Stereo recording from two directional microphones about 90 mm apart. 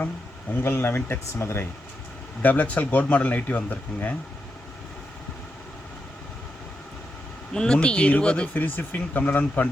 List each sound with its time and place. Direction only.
0.6 s speech: 25° left (ahead or behind)
2.4 s speech: 15° left (ahead or behind)
7.5 s speech: 10° left (ahead or behind)